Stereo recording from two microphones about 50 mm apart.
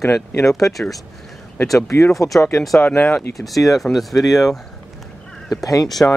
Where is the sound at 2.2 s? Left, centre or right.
Left.